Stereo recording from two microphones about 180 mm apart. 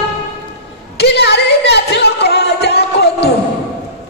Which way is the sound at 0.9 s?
65° left (ahead or behind).